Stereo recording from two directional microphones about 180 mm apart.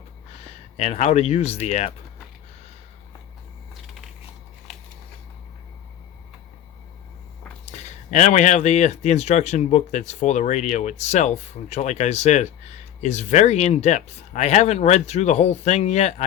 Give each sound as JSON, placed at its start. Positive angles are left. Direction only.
{"t": 0.4, "sound": "speech", "side_deg": 35}
{"t": 7.6, "sound": "speech", "side_deg": 40}